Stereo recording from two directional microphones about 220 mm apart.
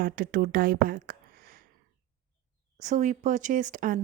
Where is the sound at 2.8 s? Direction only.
35° right (ahead or behind).